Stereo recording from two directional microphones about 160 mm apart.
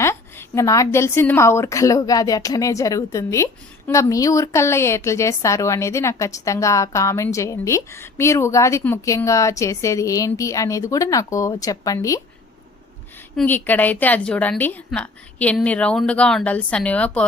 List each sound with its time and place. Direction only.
0.0 s a woman's voice: 15° left (ahead or behind)
13.3 s a woman's voice: 10° left (ahead or behind)